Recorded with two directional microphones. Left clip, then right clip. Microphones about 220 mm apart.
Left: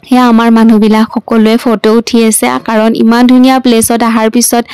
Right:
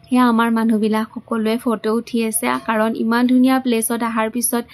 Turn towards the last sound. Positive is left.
turn(degrees=45)  # may be behind; listen again after turning